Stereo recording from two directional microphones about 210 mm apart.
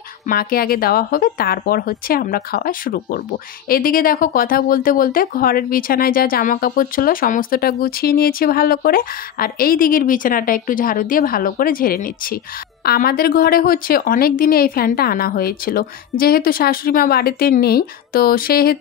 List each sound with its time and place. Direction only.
0.3 s speech: 45° left (ahead or behind)